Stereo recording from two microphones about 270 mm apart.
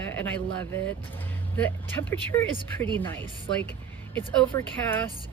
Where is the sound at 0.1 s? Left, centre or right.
Centre.